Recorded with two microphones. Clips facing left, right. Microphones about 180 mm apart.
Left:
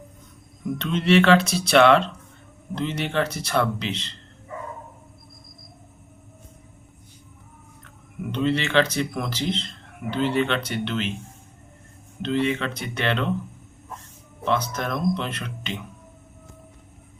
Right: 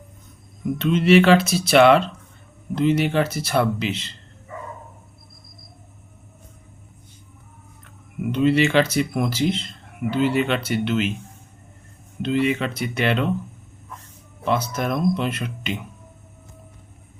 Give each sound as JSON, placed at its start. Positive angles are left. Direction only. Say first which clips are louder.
{"t": 0.8, "sound": "speech", "louder": "right 4 dB", "side_deg": -5}
{"t": 8.3, "sound": "speech", "louder": "right 5 dB", "side_deg": -10}
{"t": 12.2, "sound": "speech", "louder": "right 2 dB", "side_deg": -10}
{"t": 14.4, "sound": "speech", "louder": "right 2 dB", "side_deg": -10}